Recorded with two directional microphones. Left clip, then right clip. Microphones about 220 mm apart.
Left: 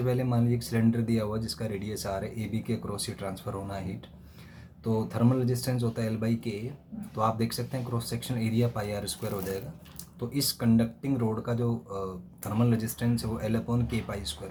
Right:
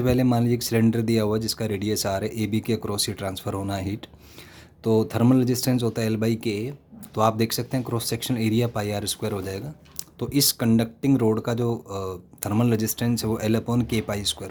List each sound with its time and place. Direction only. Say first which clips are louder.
0.0 s speech: right 7 dB; 50° right (ahead or behind)